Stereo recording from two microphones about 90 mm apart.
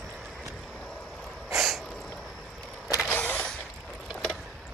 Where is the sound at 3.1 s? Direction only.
15° left (ahead or behind).